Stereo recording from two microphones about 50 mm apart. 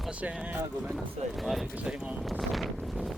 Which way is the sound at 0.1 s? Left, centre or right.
Right.